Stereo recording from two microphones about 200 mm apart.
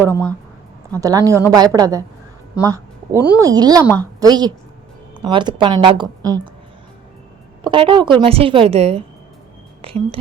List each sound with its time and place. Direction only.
0.1 s speech: 10° left (ahead or behind)
1.0 s a woman's voice: 20° right (ahead or behind)
2.6 s a sound: 15° right (ahead or behind)
3.4 s a woman's voice: 20° right (ahead or behind)
7.6 s a woman's voice: 25° right (ahead or behind)